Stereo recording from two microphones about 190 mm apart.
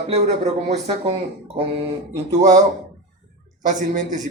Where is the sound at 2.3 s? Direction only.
40° right (ahead or behind).